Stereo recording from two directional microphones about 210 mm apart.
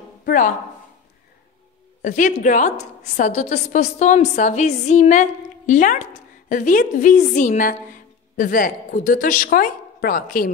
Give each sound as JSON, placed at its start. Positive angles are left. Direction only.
{"t": 0.2, "sound": "speech", "side_deg": 40}
{"t": 2.0, "sound": "a woman's voice", "side_deg": 40}